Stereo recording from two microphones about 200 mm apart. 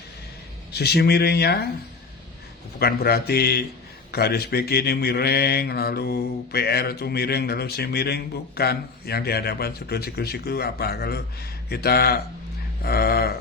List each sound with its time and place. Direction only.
0.7 s mantra: 55° left (ahead or behind)
2.7 s mantra: 50° left (ahead or behind)